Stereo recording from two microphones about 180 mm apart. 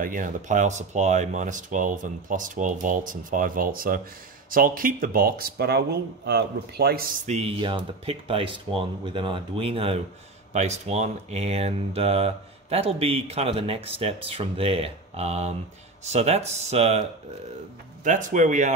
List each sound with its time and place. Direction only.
0.0 s speech: 50° right (ahead or behind)
18.0 s speech: 45° right (ahead or behind)